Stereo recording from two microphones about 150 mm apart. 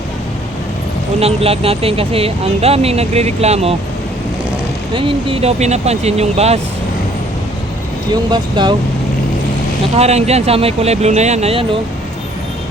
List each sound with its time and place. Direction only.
1.2 s speech: 40° right (ahead or behind)
4.9 s speech: 35° right (ahead or behind)
8.1 s speech: 30° right (ahead or behind)
9.9 s speech: 45° right (ahead or behind)